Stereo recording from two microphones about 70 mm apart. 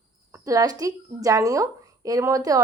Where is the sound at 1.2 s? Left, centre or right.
Right.